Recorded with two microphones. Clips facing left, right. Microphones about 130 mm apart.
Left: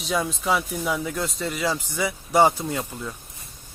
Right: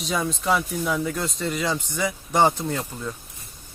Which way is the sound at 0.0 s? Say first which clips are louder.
Even; centre (ahead or behind).